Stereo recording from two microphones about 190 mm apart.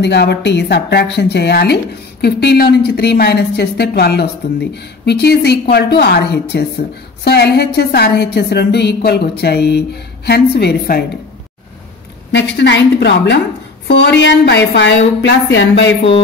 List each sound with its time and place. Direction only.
0.0 s speech: 65° left (ahead or behind)
12.3 s a woman's voice: 65° left (ahead or behind)